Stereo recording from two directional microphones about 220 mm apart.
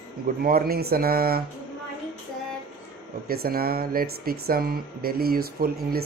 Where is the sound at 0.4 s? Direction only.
45° right (ahead or behind).